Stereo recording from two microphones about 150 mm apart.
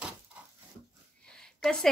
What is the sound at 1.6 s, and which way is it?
Speech, 5° left (ahead or behind).